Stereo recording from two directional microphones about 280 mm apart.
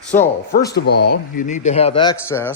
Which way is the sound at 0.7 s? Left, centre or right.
Left.